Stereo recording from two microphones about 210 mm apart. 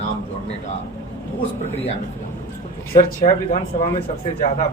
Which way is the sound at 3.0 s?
35° left (ahead or behind).